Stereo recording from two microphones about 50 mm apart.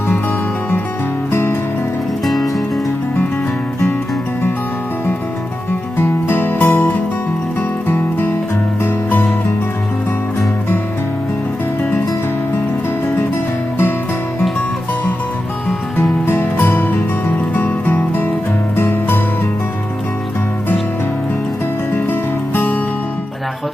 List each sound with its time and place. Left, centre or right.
1.3 s music: left
2.2 s music: centre
6.0 s music: left
16.2 s music: left
18.8 s music: left
21.9 s music: left